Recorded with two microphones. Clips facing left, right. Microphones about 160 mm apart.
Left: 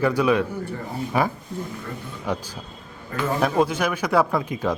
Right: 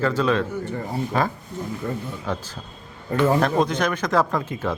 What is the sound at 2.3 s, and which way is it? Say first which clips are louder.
A man's voice: left 5 dB; 15° left (ahead or behind).